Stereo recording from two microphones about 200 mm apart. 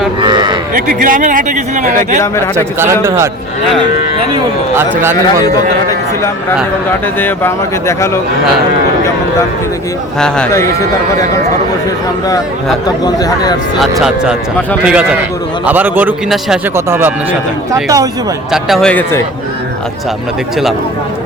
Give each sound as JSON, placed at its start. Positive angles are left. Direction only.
{"t": 0.2, "sound": "cattle", "side_deg": -20}
{"t": 0.7, "sound": "speech", "side_deg": -45}
{"t": 2.2, "sound": "speech", "side_deg": 15}
{"t": 2.7, "sound": "a man's voice", "side_deg": -10}
{"t": 7.2, "sound": "speech", "side_deg": 10}
{"t": 10.2, "sound": "speech", "side_deg": 5}
{"t": 13.1, "sound": "speech", "side_deg": 20}
{"t": 14.8, "sound": "a man's voice", "side_deg": -5}
{"t": 18.5, "sound": "speech", "side_deg": 0}